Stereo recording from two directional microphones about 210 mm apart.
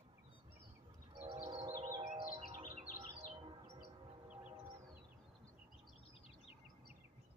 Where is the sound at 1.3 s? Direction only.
25° right (ahead or behind).